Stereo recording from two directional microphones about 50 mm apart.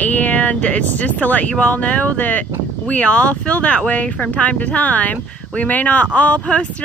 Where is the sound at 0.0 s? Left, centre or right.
Left.